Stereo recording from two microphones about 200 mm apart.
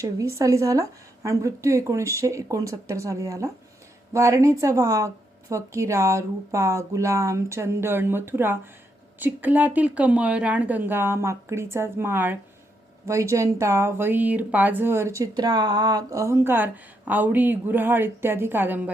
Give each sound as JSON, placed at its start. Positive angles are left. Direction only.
{"t": 0.0, "sound": "speech", "side_deg": -15}